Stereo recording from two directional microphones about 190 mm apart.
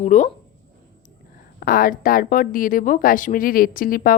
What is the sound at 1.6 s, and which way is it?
Speech, 50° left (ahead or behind).